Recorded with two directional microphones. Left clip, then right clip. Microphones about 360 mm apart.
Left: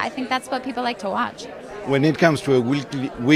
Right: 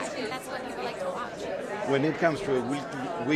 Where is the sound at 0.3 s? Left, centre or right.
Left.